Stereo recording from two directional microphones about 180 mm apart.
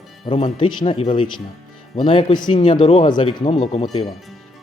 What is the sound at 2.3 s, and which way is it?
Speech, 45° left (ahead or behind).